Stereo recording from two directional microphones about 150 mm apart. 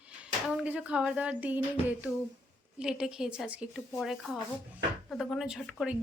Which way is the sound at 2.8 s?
5° right (ahead or behind).